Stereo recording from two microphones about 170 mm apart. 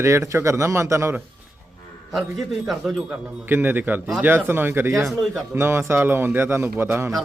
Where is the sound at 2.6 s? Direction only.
Centre (ahead or behind).